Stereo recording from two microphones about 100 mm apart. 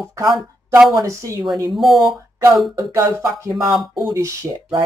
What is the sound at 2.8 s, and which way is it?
Speech, 30° right (ahead or behind).